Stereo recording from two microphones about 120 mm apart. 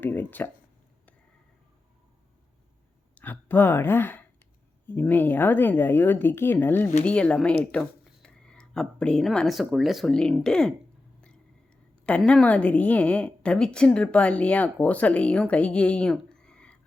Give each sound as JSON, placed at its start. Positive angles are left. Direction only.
{"t": 0.0, "sound": "speech", "side_deg": 15}
{"t": 3.2, "sound": "a woman's voice", "side_deg": 15}
{"t": 12.0, "sound": "a woman's voice", "side_deg": 10}
{"t": 16.3, "sound": "a sound", "side_deg": 5}